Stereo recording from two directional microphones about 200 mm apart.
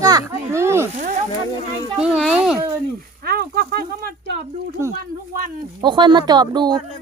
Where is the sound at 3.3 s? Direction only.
50° right (ahead or behind).